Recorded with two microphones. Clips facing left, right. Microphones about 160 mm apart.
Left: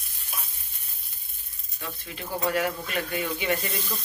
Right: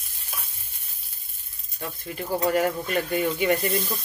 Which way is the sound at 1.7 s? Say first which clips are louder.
Right 5 dB; 45° right (ahead or behind).